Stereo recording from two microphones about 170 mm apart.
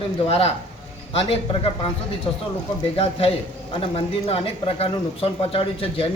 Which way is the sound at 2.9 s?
35° left (ahead or behind).